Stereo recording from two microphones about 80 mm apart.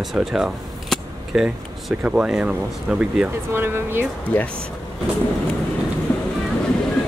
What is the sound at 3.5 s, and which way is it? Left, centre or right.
Speech, right.